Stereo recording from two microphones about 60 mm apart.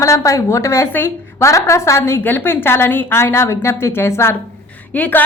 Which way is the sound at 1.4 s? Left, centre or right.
Left.